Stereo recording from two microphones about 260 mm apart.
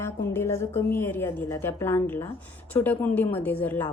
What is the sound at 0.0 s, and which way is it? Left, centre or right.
A woman's voice, centre.